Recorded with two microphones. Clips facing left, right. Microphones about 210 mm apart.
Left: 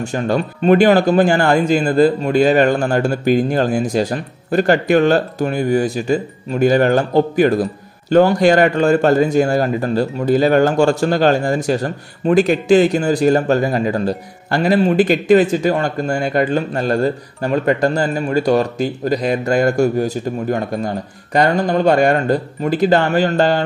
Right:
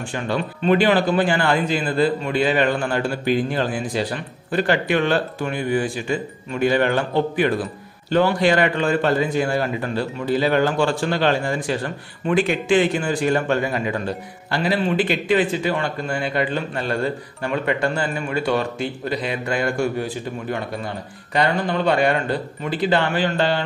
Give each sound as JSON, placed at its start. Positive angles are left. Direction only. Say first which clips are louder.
{"t": 0.0, "sound": "a man's voice", "louder": "left 6 dB", "side_deg": 45}